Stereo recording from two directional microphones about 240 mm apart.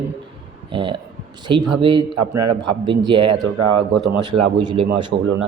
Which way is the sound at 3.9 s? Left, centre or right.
Centre.